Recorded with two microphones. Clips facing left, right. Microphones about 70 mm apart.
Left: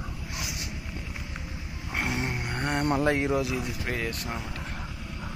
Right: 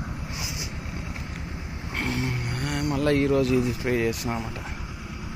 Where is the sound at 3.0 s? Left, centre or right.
Centre.